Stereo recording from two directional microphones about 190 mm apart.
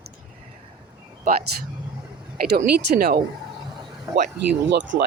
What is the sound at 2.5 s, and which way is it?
Speech, 55° right (ahead or behind).